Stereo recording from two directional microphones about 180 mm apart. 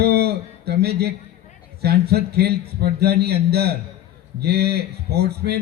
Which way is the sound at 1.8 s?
60° right (ahead or behind).